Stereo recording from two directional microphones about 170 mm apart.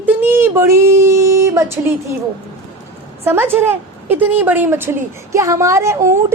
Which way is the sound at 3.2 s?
10° right (ahead or behind).